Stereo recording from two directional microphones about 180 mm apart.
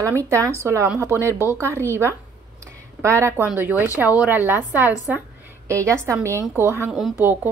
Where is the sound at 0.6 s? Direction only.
15° right (ahead or behind).